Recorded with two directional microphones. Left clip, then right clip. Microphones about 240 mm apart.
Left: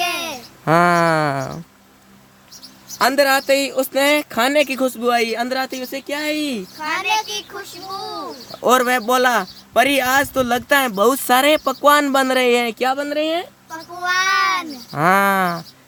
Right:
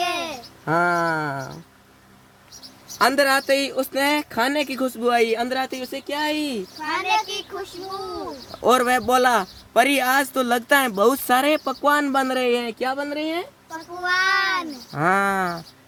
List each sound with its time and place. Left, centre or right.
0.0 s a sound: left
3.0 s speech: centre
6.8 s a sound: left
8.6 s speech: centre; by 13.4 s left
14.0 s child singing: left
14.9 s speech: centre